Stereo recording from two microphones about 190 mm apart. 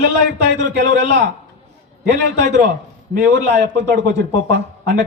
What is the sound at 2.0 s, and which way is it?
A man's voice, 65° right (ahead or behind).